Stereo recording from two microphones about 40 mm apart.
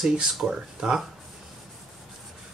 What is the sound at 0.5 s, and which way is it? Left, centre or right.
Speech, centre.